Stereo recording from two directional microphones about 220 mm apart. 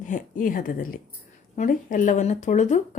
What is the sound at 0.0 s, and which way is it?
A woman's voice, 35° left (ahead or behind).